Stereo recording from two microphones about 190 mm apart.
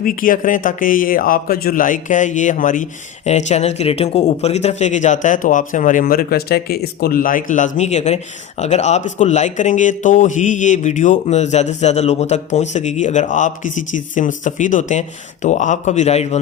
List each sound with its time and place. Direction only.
0.0 s a man's voice: 45° left (ahead or behind)